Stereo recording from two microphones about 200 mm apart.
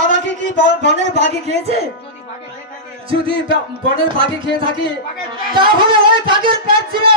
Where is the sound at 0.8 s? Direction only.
35° right (ahead or behind).